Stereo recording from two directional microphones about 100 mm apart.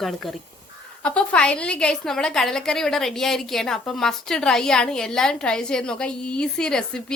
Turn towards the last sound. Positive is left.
turn(degrees=5)  # may be behind; listen again after turning